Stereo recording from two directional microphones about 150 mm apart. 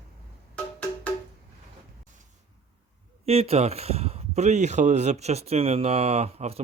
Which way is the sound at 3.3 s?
40° right (ahead or behind).